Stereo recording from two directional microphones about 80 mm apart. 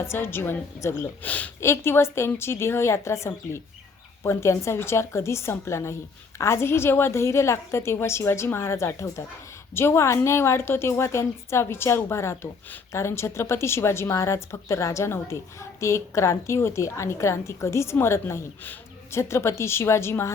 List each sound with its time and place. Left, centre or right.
0.0 s a woman's voice: left
1.2 s speech: centre
1.6 s a woman's voice: left
18.6 s a sound: left
19.2 s a woman's voice: left